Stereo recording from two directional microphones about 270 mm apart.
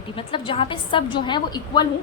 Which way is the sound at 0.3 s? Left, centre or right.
Centre.